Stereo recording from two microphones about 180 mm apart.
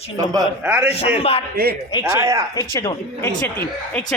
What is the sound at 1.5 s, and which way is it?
Speech, 60° right (ahead or behind).